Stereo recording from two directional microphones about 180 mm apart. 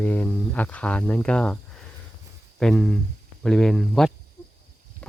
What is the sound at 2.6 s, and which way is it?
Speech, 5° left (ahead or behind).